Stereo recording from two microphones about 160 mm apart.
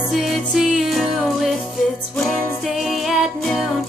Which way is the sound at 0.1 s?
Centre (ahead or behind).